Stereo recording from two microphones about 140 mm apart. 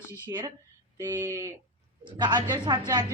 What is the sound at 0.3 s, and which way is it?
A woman's voice, 30° right (ahead or behind).